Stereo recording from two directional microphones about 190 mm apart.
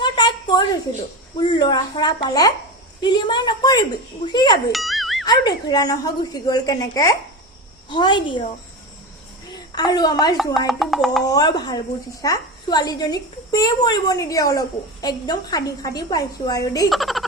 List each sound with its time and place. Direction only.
0.0 s a sound: 25° left (ahead or behind)
1.4 s a woman's voice: 25° left (ahead or behind)
4.7 s music: centre (ahead or behind)
5.2 s a woman's voice: 20° left (ahead or behind)
9.7 s a woman's voice: 20° left (ahead or behind)
10.7 s speech: centre (ahead or behind)
11.3 s a woman's voice: 20° left (ahead or behind)
16.9 s speech: centre (ahead or behind)